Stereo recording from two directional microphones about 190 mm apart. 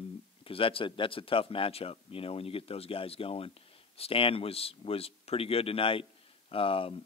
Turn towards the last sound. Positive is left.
turn(degrees=30)  # may be behind; listen again after turning